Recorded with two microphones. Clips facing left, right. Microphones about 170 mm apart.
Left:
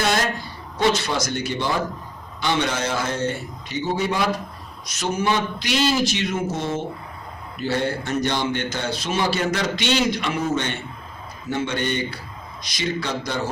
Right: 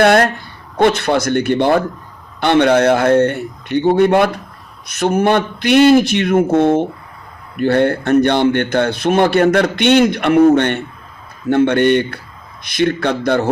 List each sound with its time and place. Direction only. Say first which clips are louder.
0.0 s a man's voice: right 11 dB; 60° right (ahead or behind)